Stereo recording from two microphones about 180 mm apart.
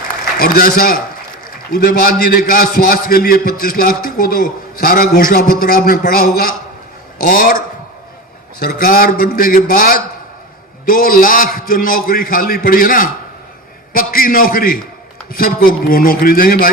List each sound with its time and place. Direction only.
0.3 s a man's voice: 55° left (ahead or behind)